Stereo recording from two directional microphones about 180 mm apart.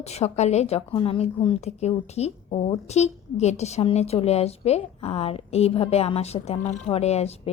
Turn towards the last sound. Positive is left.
turn(degrees=35)  # may be behind; listen again after turning